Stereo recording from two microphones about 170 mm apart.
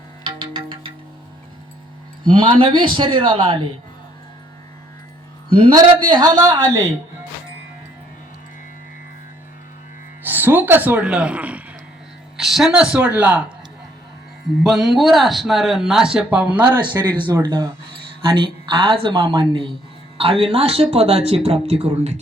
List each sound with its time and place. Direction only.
0.3 s music: 25° right (ahead or behind)
2.2 s a woman's voice: 30° right (ahead or behind)
5.5 s a woman's voice: 30° right (ahead or behind)
10.2 s speech: 10° right (ahead or behind)
14.6 s speech: centre (ahead or behind)
17.0 s a woman's voice: 25° right (ahead or behind)